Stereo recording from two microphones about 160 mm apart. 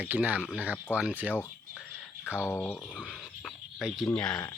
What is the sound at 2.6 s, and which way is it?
Speech, 5° left (ahead or behind).